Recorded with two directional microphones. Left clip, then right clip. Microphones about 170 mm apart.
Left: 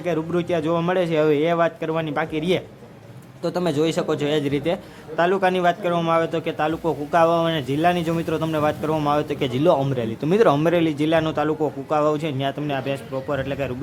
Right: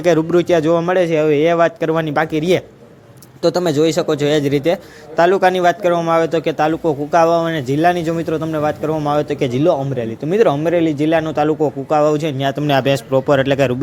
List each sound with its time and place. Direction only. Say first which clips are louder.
0.0 s a man's voice: right 10 dB; 30° right (ahead or behind)
12.6 s a man's voice: right 10 dB; 45° right (ahead or behind)